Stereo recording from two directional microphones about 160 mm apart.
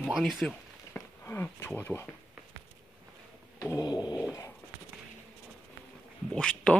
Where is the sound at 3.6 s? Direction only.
20° left (ahead or behind).